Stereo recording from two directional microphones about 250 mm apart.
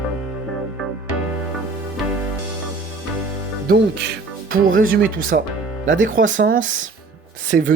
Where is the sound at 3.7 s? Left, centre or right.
Right.